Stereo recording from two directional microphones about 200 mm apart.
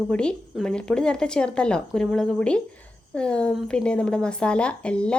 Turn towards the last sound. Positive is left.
turn(degrees=5)  # may be behind; listen again after turning